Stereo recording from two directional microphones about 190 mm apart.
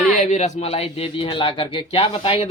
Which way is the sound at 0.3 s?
40° left (ahead or behind).